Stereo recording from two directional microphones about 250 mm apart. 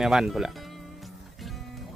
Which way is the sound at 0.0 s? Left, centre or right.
Centre.